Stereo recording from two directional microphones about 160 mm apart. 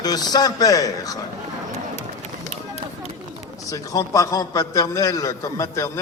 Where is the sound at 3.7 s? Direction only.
20° left (ahead or behind).